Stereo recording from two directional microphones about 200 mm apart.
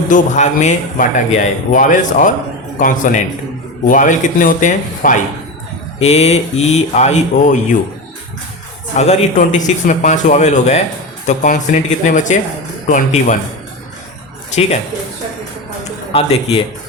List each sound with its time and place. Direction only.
0.1 s a man's voice: 35° left (ahead or behind)
9.0 s a man's voice: 35° left (ahead or behind)
16.1 s a man's voice: 25° left (ahead or behind)